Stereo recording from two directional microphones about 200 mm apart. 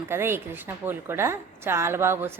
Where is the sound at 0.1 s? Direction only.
10° right (ahead or behind).